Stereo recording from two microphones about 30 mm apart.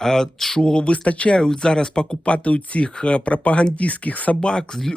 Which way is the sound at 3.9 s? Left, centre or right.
Left.